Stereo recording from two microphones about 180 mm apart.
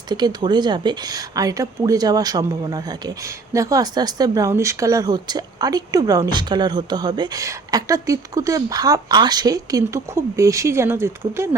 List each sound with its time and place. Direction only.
0.1 s speech: 25° right (ahead or behind)